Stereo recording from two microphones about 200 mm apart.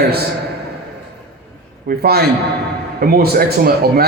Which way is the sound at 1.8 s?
50° right (ahead or behind).